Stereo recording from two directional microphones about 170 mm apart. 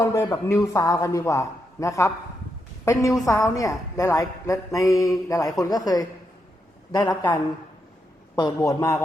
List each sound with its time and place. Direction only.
0.0 s a man's voice: 20° left (ahead or behind)
8.4 s a woman's voice: 20° left (ahead or behind)